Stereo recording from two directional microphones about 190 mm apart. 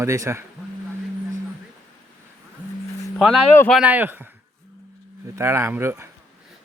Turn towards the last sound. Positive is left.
turn(degrees=-15)  # may be behind; listen again after turning